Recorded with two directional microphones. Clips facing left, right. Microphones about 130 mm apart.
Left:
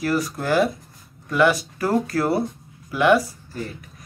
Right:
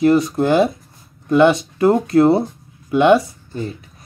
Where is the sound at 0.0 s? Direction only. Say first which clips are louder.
Right 9 dB; 25° right (ahead or behind).